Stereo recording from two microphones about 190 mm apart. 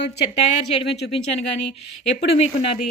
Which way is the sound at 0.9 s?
60° left (ahead or behind).